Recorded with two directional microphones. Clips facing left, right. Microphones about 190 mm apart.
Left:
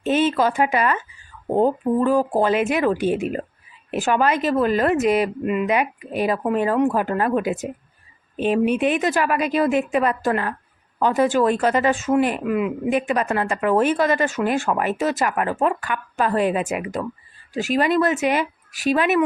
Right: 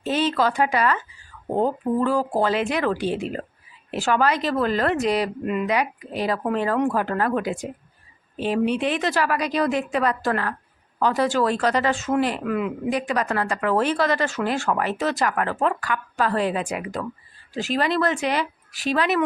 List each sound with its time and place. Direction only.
0.0 s a woman's voice: 20° left (ahead or behind)
12.9 s a woman's voice: 20° left (ahead or behind)